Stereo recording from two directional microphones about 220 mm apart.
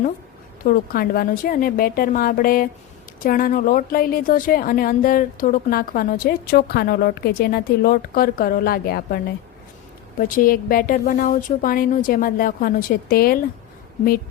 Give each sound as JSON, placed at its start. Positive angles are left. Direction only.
{"t": 0.6, "sound": "a woman's voice", "side_deg": 40}